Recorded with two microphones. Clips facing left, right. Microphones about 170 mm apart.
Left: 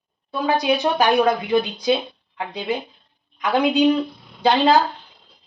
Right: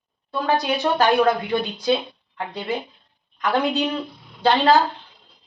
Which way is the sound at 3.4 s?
15° left (ahead or behind).